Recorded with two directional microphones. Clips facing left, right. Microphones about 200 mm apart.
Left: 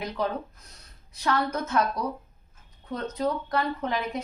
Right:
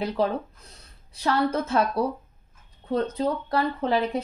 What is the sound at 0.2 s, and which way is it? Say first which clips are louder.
Speech: right 2 dB; 30° right (ahead or behind).